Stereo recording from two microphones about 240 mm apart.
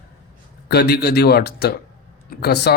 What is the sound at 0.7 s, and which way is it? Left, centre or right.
Speech, left.